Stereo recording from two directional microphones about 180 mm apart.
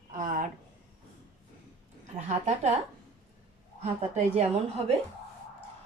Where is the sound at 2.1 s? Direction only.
40° right (ahead or behind).